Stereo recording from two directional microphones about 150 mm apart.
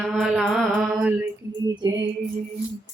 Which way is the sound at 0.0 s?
Centre (ahead or behind).